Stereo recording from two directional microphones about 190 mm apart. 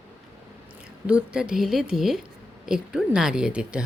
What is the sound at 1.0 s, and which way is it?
Speech, 5° right (ahead or behind).